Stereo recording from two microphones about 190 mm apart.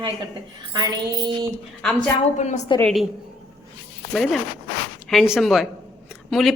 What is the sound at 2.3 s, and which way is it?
Speech, 40° left (ahead or behind).